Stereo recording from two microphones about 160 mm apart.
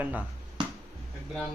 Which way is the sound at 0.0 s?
10° right (ahead or behind).